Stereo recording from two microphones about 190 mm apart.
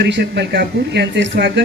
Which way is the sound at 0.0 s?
60° right (ahead or behind).